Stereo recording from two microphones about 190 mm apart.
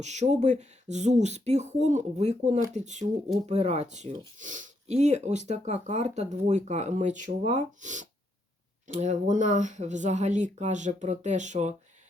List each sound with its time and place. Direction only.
0.0 s speech: 35° right (ahead or behind)